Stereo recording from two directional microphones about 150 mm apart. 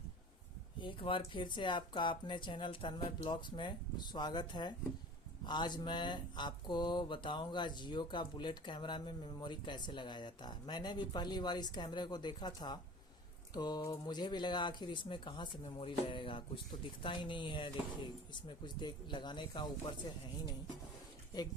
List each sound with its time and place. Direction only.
0.8 s speech: 35° left (ahead or behind)